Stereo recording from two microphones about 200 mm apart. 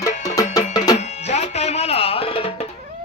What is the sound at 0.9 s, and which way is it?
Music, 35° left (ahead or behind).